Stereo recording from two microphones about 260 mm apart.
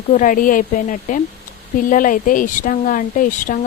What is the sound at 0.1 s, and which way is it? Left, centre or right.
Speech, left.